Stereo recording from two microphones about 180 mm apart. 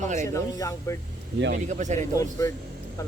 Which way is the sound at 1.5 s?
40° right (ahead or behind).